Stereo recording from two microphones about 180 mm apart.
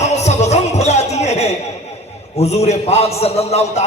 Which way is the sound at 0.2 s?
40° left (ahead or behind).